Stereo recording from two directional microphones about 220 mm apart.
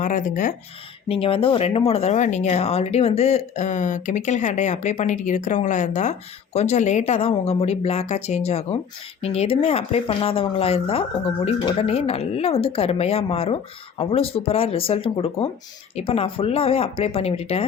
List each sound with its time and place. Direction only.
0.0 s speech: 35° left (ahead or behind)
1.0 s speech: 25° left (ahead or behind)